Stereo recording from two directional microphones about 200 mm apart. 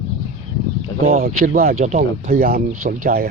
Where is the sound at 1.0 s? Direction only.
40° right (ahead or behind).